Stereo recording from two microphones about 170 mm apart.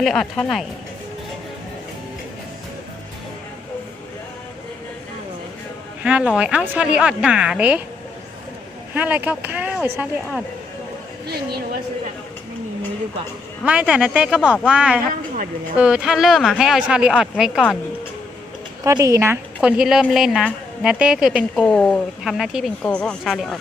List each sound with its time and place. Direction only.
0.0 s a woman's voice: 5° left (ahead or behind)
6.0 s a woman's voice: 5° right (ahead or behind)
9.0 s speech: 10° right (ahead or behind)
11.3 s a woman's voice: 70° right (ahead or behind)
13.7 s a woman's voice: 5° right (ahead or behind)
18.9 s speech: 20° right (ahead or behind)
19.6 s a woman's voice: 5° right (ahead or behind)